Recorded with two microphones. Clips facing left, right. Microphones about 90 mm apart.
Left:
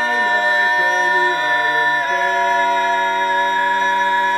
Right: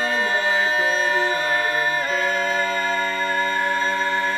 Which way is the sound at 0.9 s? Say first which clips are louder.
Left 5 dB; 40° left (ahead or behind).